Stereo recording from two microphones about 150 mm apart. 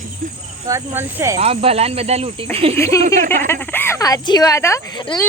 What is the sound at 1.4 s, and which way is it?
Speech, 40° right (ahead or behind).